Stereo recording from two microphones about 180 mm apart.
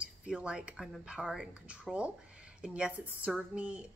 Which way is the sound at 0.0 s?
5° right (ahead or behind).